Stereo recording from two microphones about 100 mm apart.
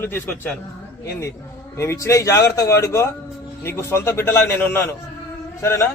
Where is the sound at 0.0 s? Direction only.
20° left (ahead or behind).